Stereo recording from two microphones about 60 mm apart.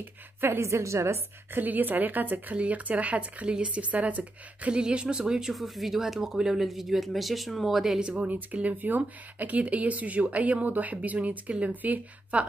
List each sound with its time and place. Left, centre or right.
0.4 s a woman's voice: right
1.6 s speech: right; by 8.0 s centre
8.0 s speech: centre